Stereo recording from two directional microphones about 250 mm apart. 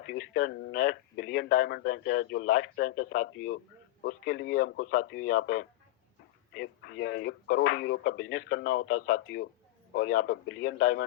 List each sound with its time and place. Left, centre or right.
0.0 s a man's voice: left
9.9 s speech: left